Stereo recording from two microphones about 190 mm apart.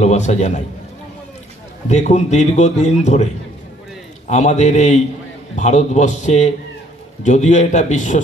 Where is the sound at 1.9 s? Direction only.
35° left (ahead or behind).